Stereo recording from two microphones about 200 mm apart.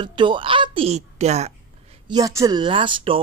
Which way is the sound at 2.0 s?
20° right (ahead or behind).